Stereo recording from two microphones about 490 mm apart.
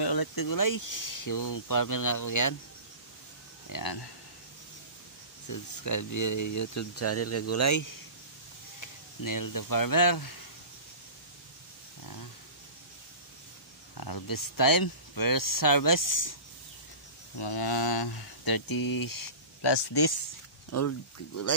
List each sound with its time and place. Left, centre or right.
0.0 s speech: left
3.6 s speech: left
5.5 s speech: left
8.8 s speech: left
12.0 s a sound: left
13.9 s speech: left
17.4 s speech: left
20.7 s speech: left